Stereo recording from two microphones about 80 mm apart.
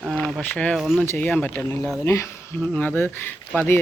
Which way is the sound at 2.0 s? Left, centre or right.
Left.